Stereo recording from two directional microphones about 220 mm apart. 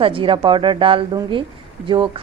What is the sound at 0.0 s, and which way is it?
A woman's voice, 25° right (ahead or behind).